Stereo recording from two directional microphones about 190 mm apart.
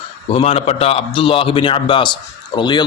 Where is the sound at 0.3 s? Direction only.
30° left (ahead or behind).